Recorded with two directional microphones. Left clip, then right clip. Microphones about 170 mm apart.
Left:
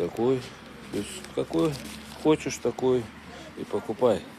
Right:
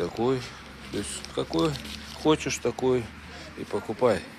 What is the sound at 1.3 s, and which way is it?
Speech, 5° left (ahead or behind).